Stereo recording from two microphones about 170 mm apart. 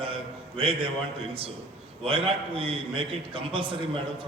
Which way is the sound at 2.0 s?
30° right (ahead or behind).